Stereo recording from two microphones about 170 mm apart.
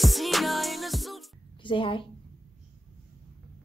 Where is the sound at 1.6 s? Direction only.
30° left (ahead or behind).